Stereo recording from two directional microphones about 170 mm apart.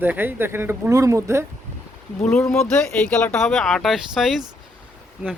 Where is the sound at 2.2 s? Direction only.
5° left (ahead or behind).